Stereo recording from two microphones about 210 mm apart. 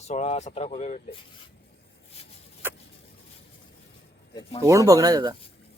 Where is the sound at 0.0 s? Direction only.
30° left (ahead or behind).